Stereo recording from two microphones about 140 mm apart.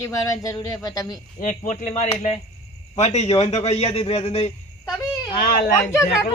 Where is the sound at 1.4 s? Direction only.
70° left (ahead or behind); by 4.5 s 50° left (ahead or behind).